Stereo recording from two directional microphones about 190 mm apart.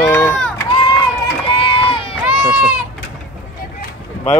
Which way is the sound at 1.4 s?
30° left (ahead or behind).